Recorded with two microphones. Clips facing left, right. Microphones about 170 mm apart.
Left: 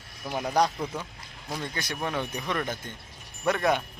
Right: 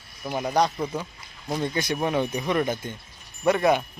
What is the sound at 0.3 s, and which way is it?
Speech, centre (ahead or behind).